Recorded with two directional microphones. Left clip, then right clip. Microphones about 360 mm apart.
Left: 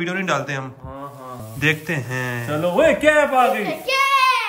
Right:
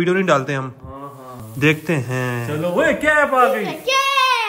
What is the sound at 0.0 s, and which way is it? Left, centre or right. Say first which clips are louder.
A man's voice: right 5 dB; centre.